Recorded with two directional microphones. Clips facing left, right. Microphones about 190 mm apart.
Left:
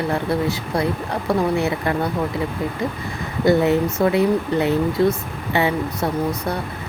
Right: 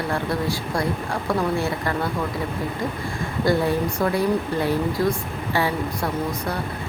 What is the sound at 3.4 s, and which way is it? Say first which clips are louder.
Speech: left 5 dB; 20° left (ahead or behind).